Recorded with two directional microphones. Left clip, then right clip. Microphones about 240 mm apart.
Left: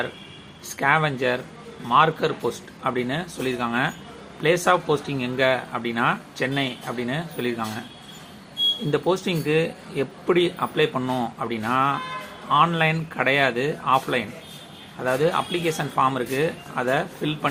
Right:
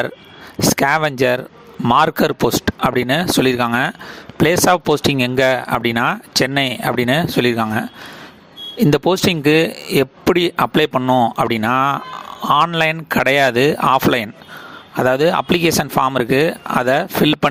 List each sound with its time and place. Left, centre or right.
0.8 s speech: right
8.9 s speech: right